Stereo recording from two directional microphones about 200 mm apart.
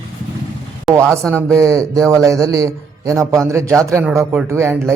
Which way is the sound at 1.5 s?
15° right (ahead or behind).